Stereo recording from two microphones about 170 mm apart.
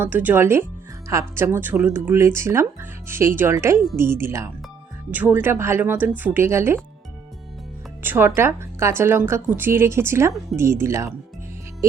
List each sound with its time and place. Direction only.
0.0 s a woman's voice: 10° right (ahead or behind)
8.0 s a woman's voice: 10° right (ahead or behind)